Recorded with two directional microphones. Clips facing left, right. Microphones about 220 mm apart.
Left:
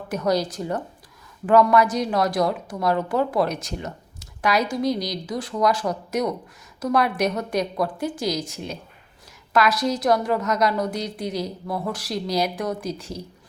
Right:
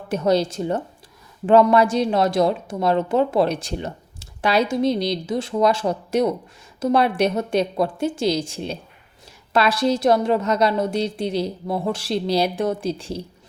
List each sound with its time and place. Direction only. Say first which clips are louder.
0.1 s a woman's voice: right 4 dB; 25° right (ahead or behind)